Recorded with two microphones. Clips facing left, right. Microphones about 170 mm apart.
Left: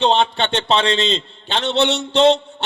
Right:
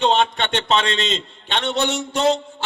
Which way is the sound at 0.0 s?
30° left (ahead or behind).